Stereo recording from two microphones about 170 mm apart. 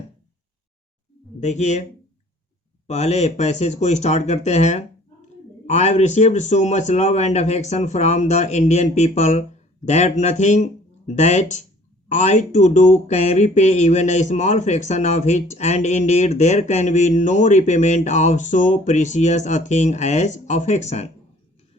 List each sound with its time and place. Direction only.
1.4 s speech: 45° left (ahead or behind)
2.8 s speech: 40° left (ahead or behind)